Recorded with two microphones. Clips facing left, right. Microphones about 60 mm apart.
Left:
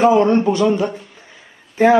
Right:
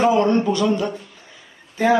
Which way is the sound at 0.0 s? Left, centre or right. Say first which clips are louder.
Left 4 dB; left.